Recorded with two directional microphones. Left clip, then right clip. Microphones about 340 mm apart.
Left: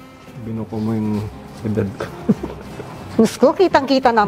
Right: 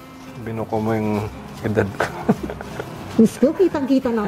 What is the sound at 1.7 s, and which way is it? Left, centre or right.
Speech, right.